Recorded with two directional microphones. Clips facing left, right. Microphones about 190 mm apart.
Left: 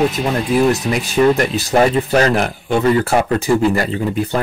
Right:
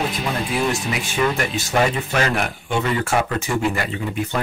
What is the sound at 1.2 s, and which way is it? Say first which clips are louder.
Speech: left 8 dB; 35° left (ahead or behind).